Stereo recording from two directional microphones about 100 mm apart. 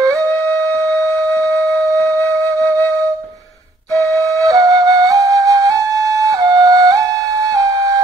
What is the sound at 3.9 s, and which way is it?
Flute, 30° left (ahead or behind).